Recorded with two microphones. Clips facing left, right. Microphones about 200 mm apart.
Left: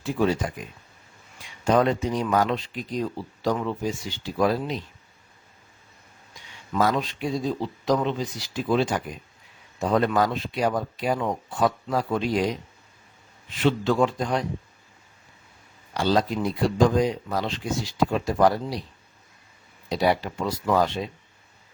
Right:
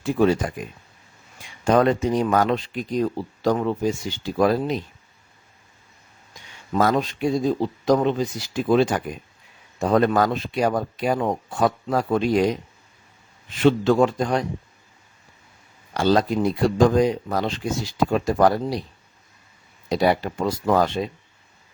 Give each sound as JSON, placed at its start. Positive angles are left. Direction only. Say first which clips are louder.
{"t": 0.0, "sound": "speech", "louder": "right 4 dB", "side_deg": -50}
{"t": 1.6, "sound": "speech", "louder": "right 3 dB", "side_deg": -50}
{"t": 6.7, "sound": "speech", "louder": "right 3 dB", "side_deg": -45}
{"t": 13.6, "sound": "speech", "louder": "right 4 dB", "side_deg": -45}
{"t": 16.0, "sound": "speech", "louder": "right 4 dB", "side_deg": -50}
{"t": 19.9, "sound": "speech", "louder": "right 3 dB", "side_deg": -50}